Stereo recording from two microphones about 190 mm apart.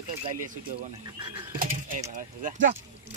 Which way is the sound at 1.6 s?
45° right (ahead or behind).